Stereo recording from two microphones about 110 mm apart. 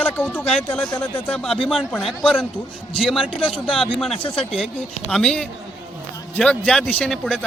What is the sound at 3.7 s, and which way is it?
A man's voice, centre (ahead or behind).